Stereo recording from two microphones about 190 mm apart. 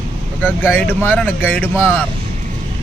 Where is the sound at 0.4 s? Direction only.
10° left (ahead or behind).